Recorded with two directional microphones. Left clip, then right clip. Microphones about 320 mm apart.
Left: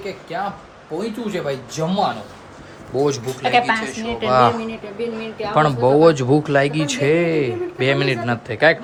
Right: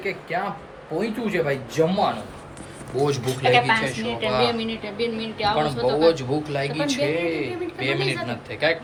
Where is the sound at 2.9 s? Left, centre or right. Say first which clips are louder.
Left 4 dB; centre.